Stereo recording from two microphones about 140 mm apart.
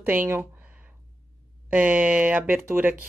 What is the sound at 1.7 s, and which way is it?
A woman's voice, 10° right (ahead or behind).